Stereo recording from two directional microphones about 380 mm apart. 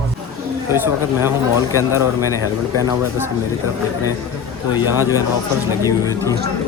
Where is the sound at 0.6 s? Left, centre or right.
Centre.